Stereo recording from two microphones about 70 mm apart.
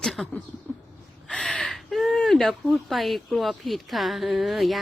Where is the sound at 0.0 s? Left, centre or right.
Centre.